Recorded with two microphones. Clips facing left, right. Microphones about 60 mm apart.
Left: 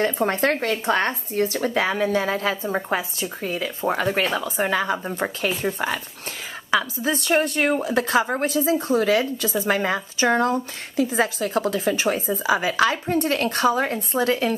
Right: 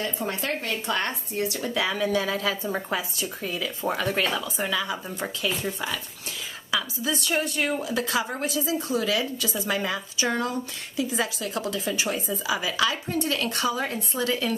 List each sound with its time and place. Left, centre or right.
0.0 s a woman's voice: left
4.4 s a woman's voice: left